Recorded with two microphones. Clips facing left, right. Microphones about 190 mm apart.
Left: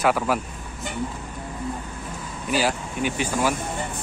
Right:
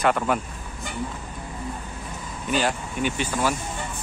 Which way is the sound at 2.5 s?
5° left (ahead or behind).